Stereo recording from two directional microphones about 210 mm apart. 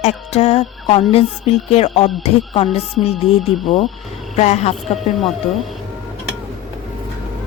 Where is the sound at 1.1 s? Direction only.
30° left (ahead or behind).